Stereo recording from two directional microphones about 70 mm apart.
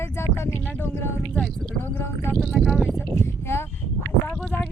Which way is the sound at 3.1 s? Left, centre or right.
Left.